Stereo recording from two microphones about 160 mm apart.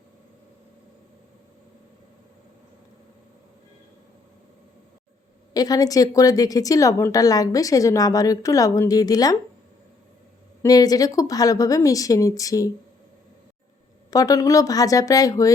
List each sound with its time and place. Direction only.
5.5 s a woman's voice: 25° left (ahead or behind)
10.6 s a woman's voice: 25° left (ahead or behind)
14.1 s a woman's voice: 20° left (ahead or behind)